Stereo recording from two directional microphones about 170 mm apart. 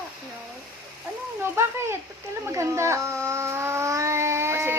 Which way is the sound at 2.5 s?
15° right (ahead or behind).